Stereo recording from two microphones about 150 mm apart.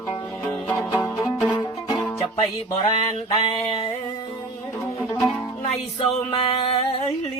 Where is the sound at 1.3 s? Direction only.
Centre (ahead or behind).